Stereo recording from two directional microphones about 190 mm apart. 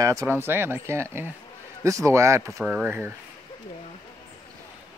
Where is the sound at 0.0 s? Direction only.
15° right (ahead or behind).